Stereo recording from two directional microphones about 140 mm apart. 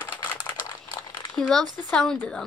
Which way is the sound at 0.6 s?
30° left (ahead or behind).